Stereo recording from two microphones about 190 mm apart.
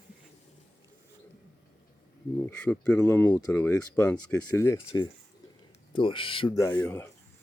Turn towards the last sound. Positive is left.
turn(degrees=10)  # may be behind; listen again after turning